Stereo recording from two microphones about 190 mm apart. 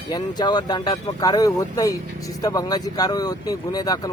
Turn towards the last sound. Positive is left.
turn(degrees=20)  # may be behind; listen again after turning